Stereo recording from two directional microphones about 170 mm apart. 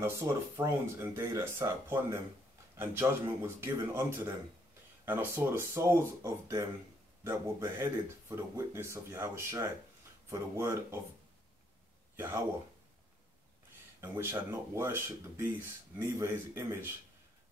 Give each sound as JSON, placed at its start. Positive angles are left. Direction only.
{"t": 0.0, "sound": "speech", "side_deg": -15}
{"t": 12.2, "sound": "speech", "side_deg": -15}
{"t": 14.0, "sound": "speech", "side_deg": -15}